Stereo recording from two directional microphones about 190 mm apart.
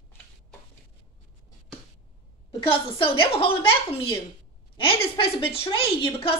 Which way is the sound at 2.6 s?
30° left (ahead or behind).